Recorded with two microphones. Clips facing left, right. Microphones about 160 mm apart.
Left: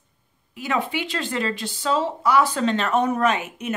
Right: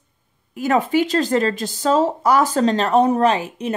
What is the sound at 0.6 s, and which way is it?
Speech, 45° right (ahead or behind).